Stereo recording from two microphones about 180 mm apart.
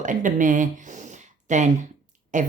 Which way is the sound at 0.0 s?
45° right (ahead or behind).